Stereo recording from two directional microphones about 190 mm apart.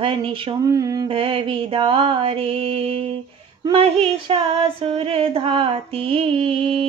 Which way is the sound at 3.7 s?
30° right (ahead or behind).